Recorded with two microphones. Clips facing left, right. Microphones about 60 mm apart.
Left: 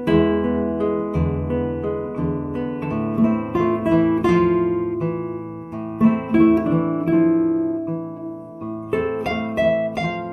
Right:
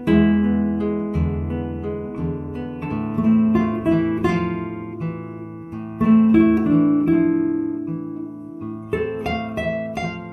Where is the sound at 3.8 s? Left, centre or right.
Centre.